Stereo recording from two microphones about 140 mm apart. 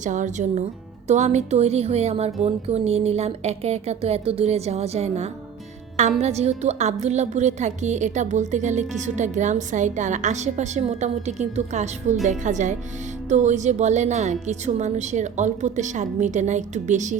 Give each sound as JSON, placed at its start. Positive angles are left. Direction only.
{"t": 0.0, "sound": "a woman's voice", "side_deg": -60}